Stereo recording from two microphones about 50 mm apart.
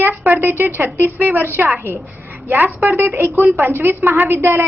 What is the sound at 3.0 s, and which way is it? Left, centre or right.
A woman's voice, right.